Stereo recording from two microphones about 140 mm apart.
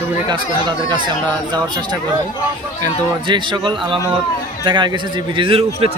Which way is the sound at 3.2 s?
35° right (ahead or behind).